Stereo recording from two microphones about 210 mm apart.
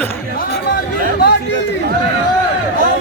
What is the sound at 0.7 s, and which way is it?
Chatter, 45° left (ahead or behind).